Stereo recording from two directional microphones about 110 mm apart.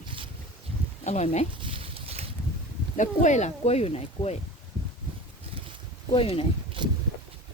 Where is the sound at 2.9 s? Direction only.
90° left; by 4.4 s 70° left (ahead or behind).